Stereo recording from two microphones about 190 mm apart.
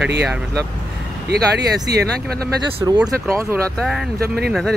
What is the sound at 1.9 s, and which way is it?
Speech, 55° right (ahead or behind).